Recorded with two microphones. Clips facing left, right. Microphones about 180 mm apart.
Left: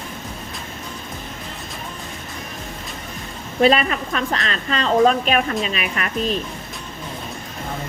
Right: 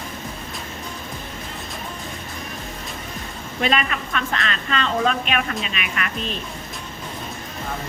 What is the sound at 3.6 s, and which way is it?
A woman's voice, 35° left (ahead or behind).